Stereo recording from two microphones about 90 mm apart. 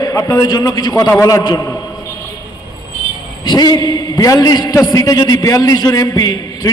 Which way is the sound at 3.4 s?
50° left (ahead or behind).